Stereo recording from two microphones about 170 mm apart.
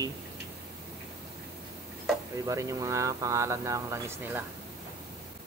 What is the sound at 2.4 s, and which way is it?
Speech, 20° right (ahead or behind).